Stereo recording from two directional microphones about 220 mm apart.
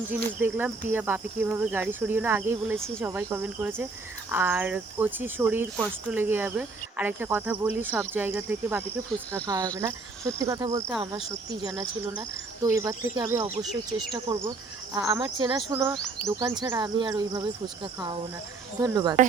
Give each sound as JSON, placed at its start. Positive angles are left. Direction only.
{"t": 0.1, "sound": "speech", "side_deg": -10}
{"t": 15.7, "sound": "speech", "side_deg": -10}
{"t": 18.8, "sound": "speech", "side_deg": -15}